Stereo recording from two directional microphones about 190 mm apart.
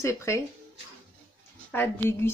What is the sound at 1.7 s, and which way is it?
Speech, 10° left (ahead or behind).